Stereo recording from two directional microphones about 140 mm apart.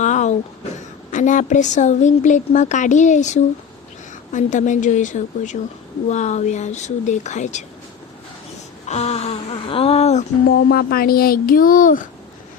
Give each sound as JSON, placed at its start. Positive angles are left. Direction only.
{"t": 0.0, "sound": "a sound", "side_deg": 60}
{"t": 1.1, "sound": "speech", "side_deg": 60}
{"t": 8.9, "sound": "speech", "side_deg": 50}
{"t": 10.5, "sound": "speech", "side_deg": 90}